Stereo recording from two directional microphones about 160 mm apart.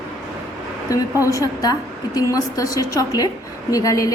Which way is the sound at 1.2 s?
20° left (ahead or behind).